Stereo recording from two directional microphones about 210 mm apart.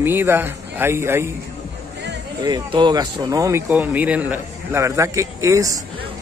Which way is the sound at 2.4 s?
20° right (ahead or behind).